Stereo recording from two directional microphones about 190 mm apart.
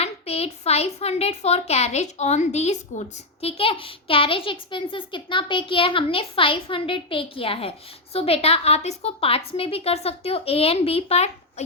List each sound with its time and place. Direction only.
0.0 s a woman's voice: 35° left (ahead or behind)